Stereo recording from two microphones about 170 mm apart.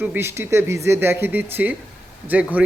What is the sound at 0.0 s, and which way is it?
A man's voice, 10° right (ahead or behind).